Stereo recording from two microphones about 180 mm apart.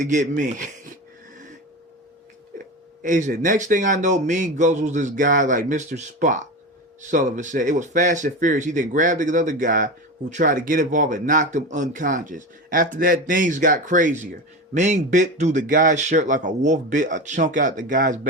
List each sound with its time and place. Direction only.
0.0 s speech: 45° right (ahead or behind)
3.0 s speech: 45° right (ahead or behind)